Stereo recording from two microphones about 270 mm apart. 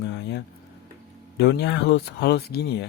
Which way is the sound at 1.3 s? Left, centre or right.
Left.